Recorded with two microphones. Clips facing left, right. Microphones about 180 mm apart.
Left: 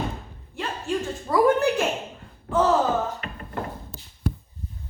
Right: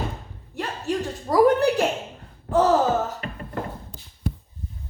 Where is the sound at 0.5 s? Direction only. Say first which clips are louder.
Right 1 dB; 40° right (ahead or behind).